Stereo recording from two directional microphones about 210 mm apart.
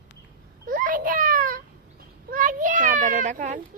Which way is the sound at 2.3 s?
40° right (ahead or behind).